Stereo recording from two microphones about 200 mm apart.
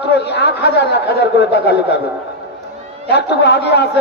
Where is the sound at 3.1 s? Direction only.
60° left (ahead or behind).